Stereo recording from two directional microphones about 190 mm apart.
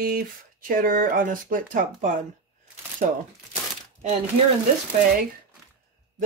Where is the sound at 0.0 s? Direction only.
50° right (ahead or behind).